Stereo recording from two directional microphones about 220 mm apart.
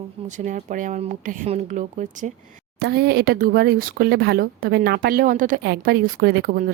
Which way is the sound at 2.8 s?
50° right (ahead or behind).